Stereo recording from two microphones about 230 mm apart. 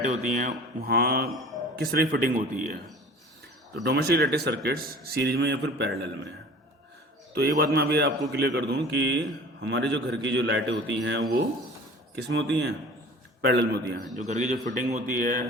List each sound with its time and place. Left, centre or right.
0.0 s speech: right
3.8 s a man's voice: right
7.3 s a man's voice: right
14.2 s speech: right